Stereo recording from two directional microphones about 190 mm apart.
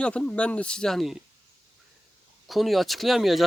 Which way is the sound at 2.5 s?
Centre (ahead or behind).